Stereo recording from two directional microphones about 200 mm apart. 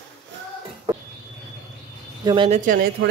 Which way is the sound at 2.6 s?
45° right (ahead or behind).